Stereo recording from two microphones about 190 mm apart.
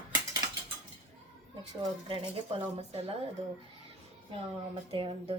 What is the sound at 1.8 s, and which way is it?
Speech, 25° right (ahead or behind).